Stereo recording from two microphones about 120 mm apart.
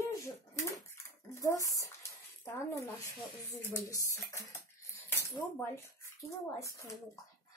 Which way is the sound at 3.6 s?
25° left (ahead or behind).